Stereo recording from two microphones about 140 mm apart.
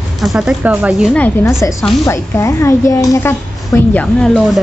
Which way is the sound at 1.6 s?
20° left (ahead or behind).